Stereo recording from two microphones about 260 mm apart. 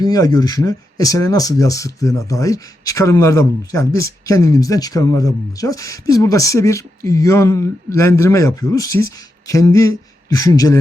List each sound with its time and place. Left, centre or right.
0.0 s speech: centre